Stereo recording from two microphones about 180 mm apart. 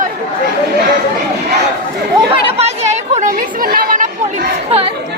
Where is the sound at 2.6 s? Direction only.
35° right (ahead or behind).